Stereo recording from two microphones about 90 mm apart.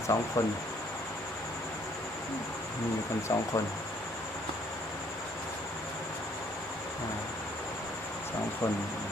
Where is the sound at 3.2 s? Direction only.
40° left (ahead or behind).